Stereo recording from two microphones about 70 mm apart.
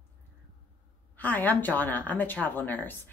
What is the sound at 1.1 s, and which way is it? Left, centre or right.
Speech, left.